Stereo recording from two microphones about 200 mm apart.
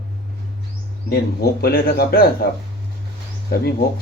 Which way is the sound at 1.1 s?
50° left (ahead or behind).